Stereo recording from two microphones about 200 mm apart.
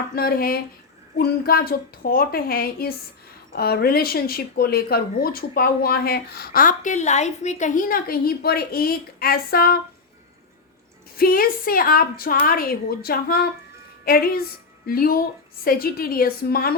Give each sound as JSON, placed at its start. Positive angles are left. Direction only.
{"t": 0.2, "sound": "speech", "side_deg": 50}
{"t": 11.2, "sound": "speech", "side_deg": 45}